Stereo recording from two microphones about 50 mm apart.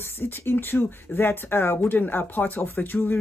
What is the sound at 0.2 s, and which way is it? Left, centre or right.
Speech, left.